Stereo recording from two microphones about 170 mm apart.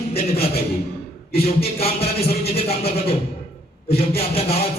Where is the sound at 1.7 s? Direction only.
35° left (ahead or behind).